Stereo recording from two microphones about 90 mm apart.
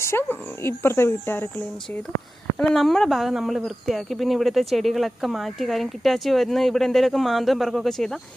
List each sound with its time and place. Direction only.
0.0 s speech: 25° left (ahead or behind)
2.6 s speech: 5° left (ahead or behind)